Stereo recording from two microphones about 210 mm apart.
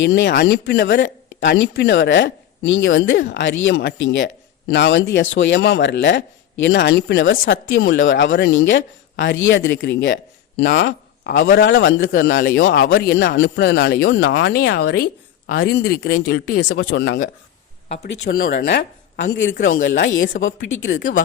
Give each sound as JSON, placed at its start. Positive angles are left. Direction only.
{"t": 0.0, "sound": "speech", "side_deg": 55}
{"t": 12.1, "sound": "speech", "side_deg": 55}